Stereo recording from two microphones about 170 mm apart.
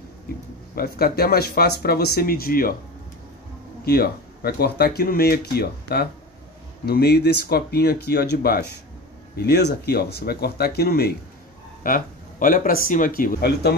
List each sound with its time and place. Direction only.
0.7 s speech: 65° left (ahead or behind)
3.8 s speech: 65° left (ahead or behind)
11.8 s speech: 55° left (ahead or behind); by 13.7 s 70° left (ahead or behind)